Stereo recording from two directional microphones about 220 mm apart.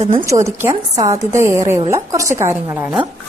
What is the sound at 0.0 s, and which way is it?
Speech, 30° right (ahead or behind).